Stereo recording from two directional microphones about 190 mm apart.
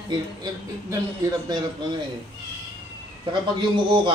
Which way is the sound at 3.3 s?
25° right (ahead or behind).